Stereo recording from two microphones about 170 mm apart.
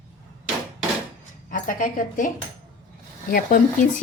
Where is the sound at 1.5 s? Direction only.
50° left (ahead or behind).